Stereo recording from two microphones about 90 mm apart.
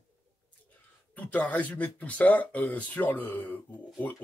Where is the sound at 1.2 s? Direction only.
15° left (ahead or behind).